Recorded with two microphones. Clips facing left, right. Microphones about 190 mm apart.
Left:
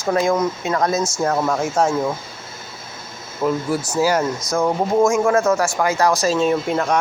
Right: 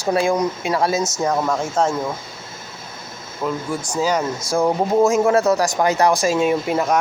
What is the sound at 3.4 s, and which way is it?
Speech, 5° left (ahead or behind).